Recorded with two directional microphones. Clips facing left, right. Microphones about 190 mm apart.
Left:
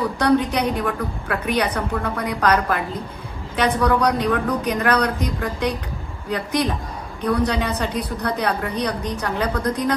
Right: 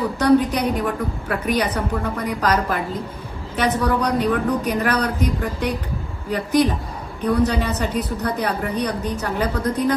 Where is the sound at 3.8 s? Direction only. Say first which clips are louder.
Left 2 dB; 10° right (ahead or behind).